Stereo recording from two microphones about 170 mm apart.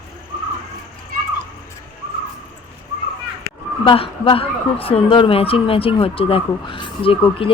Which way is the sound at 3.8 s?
30° left (ahead or behind).